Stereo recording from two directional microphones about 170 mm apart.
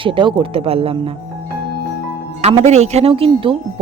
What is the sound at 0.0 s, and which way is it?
Speech, 30° right (ahead or behind).